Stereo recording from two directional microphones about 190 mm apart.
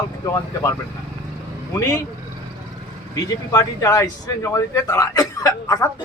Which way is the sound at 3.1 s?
15° left (ahead or behind).